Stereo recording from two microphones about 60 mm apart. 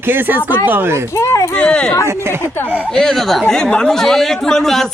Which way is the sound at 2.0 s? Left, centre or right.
Right.